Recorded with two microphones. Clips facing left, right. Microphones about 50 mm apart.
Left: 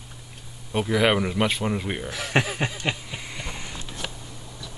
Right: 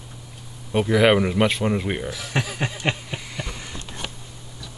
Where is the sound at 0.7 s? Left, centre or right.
Centre.